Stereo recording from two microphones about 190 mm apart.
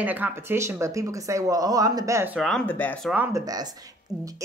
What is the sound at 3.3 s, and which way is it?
Speech, 20° right (ahead or behind).